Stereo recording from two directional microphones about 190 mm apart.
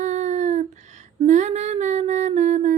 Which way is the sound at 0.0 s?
40° right (ahead or behind).